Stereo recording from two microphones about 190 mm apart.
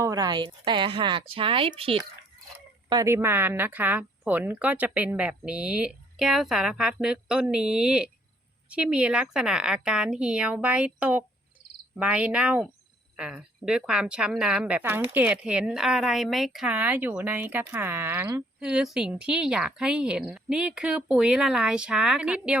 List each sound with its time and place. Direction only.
0.0 s speech: 20° right (ahead or behind)
2.9 s speech: 15° right (ahead or behind)